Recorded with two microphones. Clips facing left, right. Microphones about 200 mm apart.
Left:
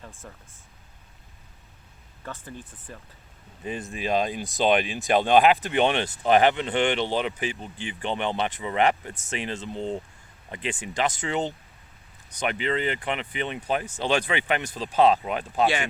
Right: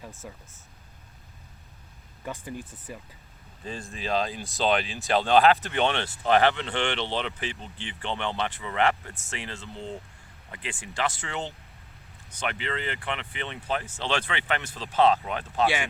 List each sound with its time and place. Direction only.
0.2 s speech: 5° right (ahead or behind)
2.2 s speech: 15° right (ahead or behind)
3.6 s speech: 20° left (ahead or behind)